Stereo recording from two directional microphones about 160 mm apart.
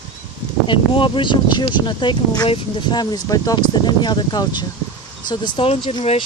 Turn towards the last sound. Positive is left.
turn(degrees=35)  # may be behind; listen again after turning